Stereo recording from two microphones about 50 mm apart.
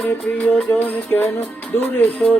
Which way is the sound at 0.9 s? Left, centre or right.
Left.